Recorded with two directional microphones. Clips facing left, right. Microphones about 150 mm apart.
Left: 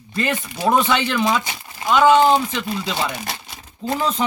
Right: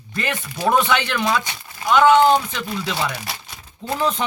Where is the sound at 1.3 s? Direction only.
20° left (ahead or behind).